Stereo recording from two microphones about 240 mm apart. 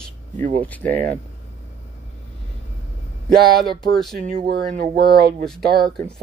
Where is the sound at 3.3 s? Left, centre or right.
Right.